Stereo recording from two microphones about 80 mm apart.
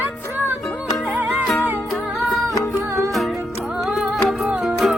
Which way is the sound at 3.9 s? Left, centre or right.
Centre.